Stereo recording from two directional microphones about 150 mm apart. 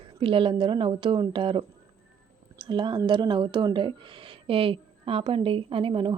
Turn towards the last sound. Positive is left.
turn(degrees=-35)  # may be behind; listen again after turning